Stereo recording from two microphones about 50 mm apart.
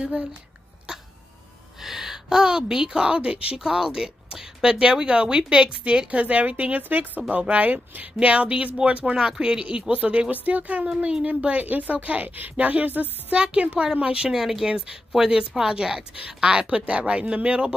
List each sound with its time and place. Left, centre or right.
0.0 s speech: right
1.8 s a woman's voice: centre; by 3.5 s right
3.5 s a woman's voice: centre; by 13.4 s right
13.4 s speech: right
14.3 s a woman's voice: centre